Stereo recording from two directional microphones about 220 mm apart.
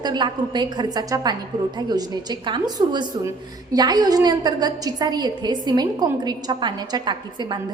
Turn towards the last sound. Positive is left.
turn(degrees=-20)  # may be behind; listen again after turning